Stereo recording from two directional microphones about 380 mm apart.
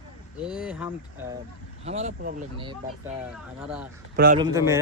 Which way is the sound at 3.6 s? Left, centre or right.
Centre.